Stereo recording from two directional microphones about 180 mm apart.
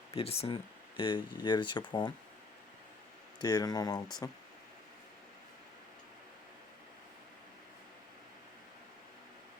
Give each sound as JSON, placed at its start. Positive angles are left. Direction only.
{"t": 0.1, "sound": "speech", "side_deg": 35}
{"t": 3.4, "sound": "speech", "side_deg": 20}